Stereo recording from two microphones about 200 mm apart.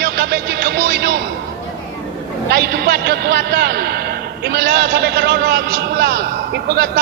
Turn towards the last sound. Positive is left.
turn(degrees=-50)  # may be behind; listen again after turning